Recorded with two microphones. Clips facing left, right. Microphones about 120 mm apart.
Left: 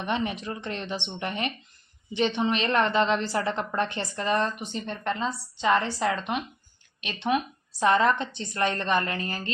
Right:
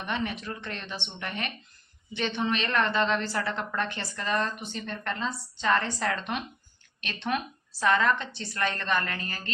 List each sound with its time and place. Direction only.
0.0 s speech: 20° left (ahead or behind)
7.9 s speech: 25° left (ahead or behind)